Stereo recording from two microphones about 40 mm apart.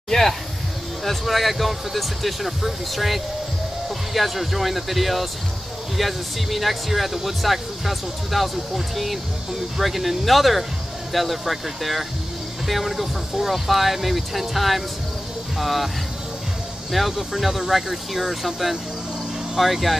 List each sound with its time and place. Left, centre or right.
0.1 s a sound: centre
1.0 s speech: centre
16.9 s speech: centre